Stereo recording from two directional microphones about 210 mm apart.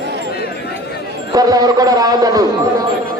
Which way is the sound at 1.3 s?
20° right (ahead or behind).